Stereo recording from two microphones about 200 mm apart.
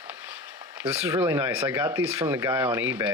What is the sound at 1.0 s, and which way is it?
Speech, 10° right (ahead or behind).